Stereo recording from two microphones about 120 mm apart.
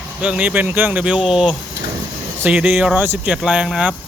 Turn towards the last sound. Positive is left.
turn(degrees=-5)  # may be behind; listen again after turning